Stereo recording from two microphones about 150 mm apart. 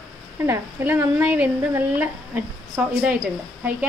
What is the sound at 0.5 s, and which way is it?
Speech, 15° right (ahead or behind).